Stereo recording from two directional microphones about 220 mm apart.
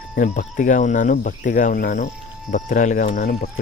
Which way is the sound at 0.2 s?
35° left (ahead or behind).